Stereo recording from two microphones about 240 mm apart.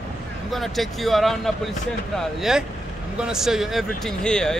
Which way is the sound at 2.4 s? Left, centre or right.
Centre.